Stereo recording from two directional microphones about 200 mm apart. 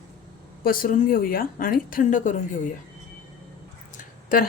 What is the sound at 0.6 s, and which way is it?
A woman's voice, 45° left (ahead or behind).